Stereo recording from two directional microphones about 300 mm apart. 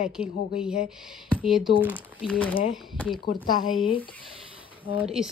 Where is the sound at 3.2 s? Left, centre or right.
Left.